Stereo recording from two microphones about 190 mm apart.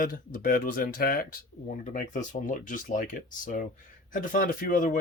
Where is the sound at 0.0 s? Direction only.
50° left (ahead or behind).